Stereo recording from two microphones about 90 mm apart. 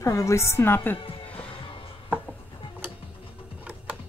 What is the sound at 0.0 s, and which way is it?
Speech, 35° left (ahead or behind).